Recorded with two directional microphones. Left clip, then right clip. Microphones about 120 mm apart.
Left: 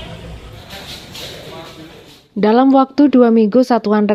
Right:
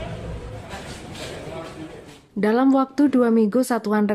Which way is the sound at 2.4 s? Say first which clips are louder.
Left 8 dB; 35° left (ahead or behind).